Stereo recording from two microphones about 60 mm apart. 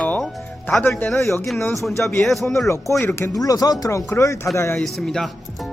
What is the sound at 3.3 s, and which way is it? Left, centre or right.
Speech, left.